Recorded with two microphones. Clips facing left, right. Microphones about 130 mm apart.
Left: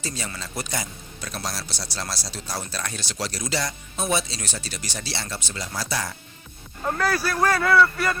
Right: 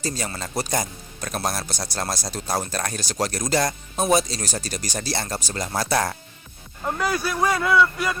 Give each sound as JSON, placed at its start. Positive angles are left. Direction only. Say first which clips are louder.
{"t": 0.0, "sound": "speech", "louder": "right 4 dB", "side_deg": -40}
{"t": 6.8, "sound": "a man's voice", "louder": "even", "side_deg": -5}